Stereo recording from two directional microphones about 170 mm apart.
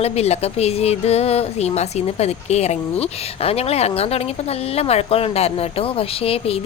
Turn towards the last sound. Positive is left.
turn(degrees=35)  # may be behind; listen again after turning